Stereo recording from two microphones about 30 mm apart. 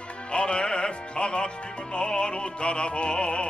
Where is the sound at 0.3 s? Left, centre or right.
Left.